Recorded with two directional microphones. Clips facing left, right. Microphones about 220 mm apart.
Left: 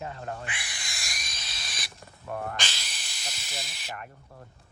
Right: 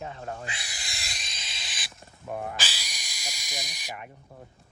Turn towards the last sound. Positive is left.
turn(degrees=-10)  # may be behind; listen again after turning